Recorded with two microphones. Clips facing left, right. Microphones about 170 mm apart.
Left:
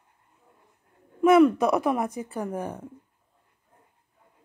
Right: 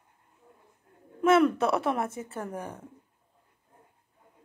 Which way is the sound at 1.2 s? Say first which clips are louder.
Left 4 dB; 15° left (ahead or behind).